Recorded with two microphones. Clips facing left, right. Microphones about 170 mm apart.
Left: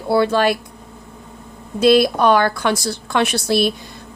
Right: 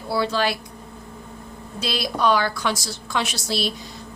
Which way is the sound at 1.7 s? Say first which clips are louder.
Left 12 dB; 55° left (ahead or behind).